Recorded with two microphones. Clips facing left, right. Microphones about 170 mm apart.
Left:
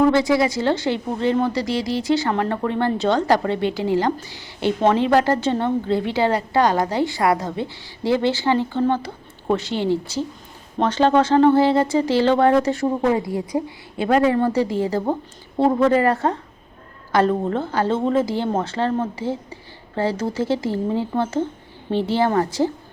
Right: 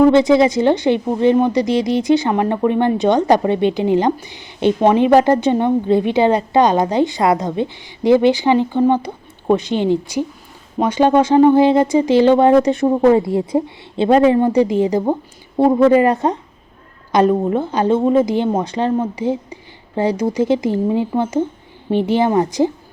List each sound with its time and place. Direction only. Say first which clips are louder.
0.1 s a woman's voice: right 6 dB; 20° right (ahead or behind)
12.9 s a woman's voice: right 7 dB; 35° right (ahead or behind); by 22.7 s 15° right (ahead or behind)